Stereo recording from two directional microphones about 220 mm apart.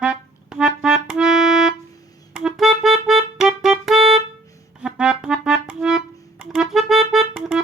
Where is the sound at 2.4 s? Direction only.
Centre (ahead or behind).